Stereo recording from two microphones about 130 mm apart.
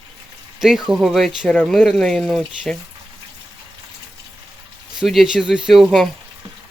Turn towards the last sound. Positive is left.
turn(degrees=0)  # may be behind; listen again after turning